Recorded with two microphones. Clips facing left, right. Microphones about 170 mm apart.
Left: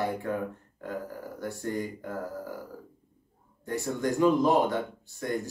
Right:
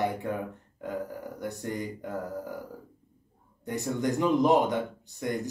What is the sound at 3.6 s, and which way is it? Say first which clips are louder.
Speech: even; 20° right (ahead or behind).